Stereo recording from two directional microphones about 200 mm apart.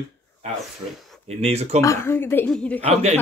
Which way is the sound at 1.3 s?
30° right (ahead or behind).